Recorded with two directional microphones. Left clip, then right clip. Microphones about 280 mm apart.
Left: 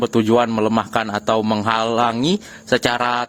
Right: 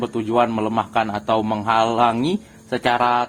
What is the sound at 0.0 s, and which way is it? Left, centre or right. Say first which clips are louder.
Speech: left 3 dB; left.